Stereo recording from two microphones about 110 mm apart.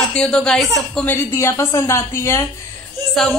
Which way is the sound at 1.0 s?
20° left (ahead or behind).